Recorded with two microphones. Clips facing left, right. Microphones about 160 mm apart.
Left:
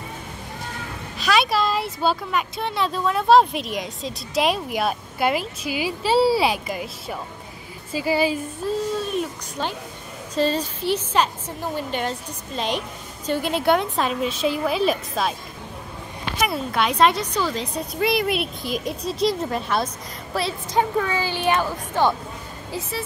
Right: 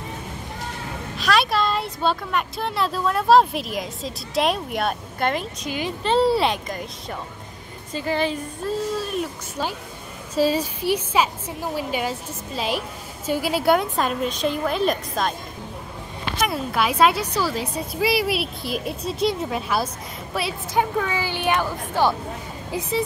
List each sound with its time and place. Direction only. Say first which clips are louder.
1.1 s a woman's voice: even; centre (ahead or behind)
16.3 s a woman's voice: even; centre (ahead or behind); by 23.0 s 20° right (ahead or behind)